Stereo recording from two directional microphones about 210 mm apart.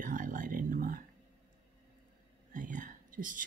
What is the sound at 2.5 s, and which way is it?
Speech, 40° right (ahead or behind).